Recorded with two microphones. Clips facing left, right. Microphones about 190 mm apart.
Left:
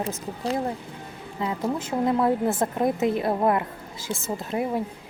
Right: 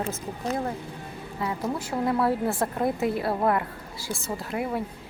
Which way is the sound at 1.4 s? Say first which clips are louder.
Left 2 dB; 20° left (ahead or behind).